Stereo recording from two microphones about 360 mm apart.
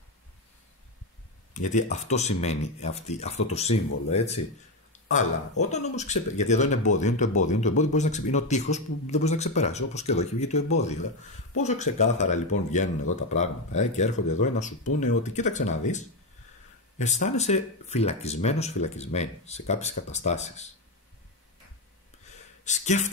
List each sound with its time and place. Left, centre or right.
1.5 s speech: centre
22.7 s speech: centre